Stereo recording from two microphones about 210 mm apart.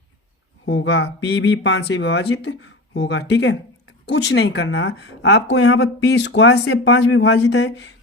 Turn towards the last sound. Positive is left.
turn(degrees=55)  # may be behind; listen again after turning